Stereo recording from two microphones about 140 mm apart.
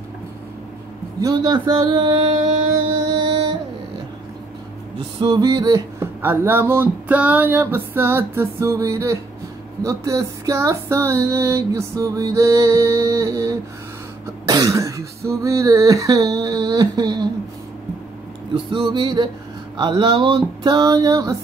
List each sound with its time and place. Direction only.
1.2 s female singing: 30° right (ahead or behind)
3.2 s music: 35° right (ahead or behind)
5.2 s female singing: 30° right (ahead or behind)
6.2 s a sound: 15° right (ahead or behind)
9.8 s female singing: 25° right (ahead or behind)
18.5 s speech: 35° right (ahead or behind)